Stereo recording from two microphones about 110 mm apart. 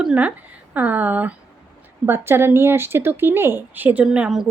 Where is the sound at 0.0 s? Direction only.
10° right (ahead or behind).